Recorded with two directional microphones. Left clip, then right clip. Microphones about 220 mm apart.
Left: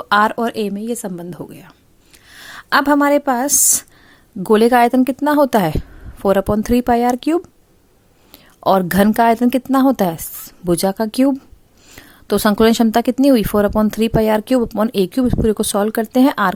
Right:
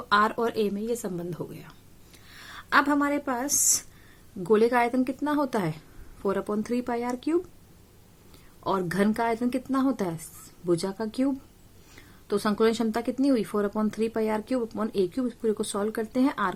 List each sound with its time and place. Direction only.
0.1 s a woman's voice: 35° left (ahead or behind)